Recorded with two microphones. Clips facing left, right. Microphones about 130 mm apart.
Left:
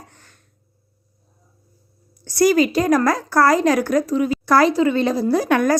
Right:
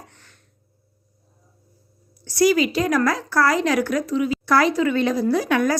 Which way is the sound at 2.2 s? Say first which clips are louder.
Left 2 dB; 45° left (ahead or behind).